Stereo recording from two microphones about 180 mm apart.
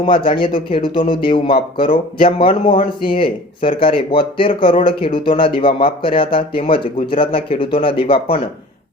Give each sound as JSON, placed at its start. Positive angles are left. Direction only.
{"t": 0.0, "sound": "speech", "side_deg": 30}